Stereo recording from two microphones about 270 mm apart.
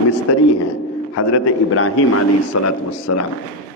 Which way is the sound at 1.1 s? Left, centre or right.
Left.